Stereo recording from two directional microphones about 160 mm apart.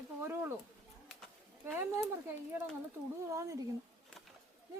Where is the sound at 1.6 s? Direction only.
15° right (ahead or behind).